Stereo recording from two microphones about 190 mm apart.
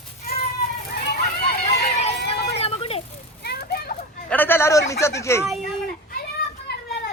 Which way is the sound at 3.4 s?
55° left (ahead or behind).